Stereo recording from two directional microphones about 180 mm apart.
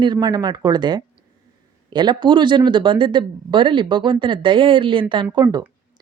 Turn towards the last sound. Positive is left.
turn(degrees=-20)  # may be behind; listen again after turning